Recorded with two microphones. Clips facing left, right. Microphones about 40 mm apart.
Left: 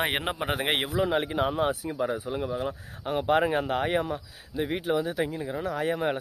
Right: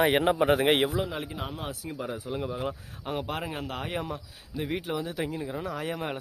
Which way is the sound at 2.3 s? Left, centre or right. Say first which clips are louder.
Left 2 dB; centre.